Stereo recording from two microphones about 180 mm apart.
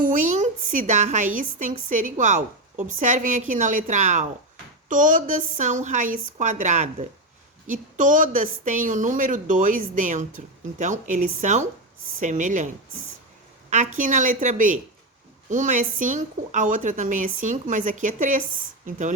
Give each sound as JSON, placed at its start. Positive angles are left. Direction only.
{"t": 0.0, "sound": "a woman's voice", "side_deg": -45}